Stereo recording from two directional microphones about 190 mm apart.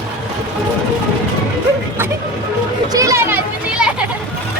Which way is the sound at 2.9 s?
15° right (ahead or behind).